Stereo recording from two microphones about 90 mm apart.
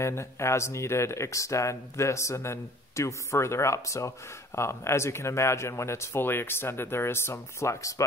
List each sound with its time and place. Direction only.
0.0 s speech: 30° left (ahead or behind)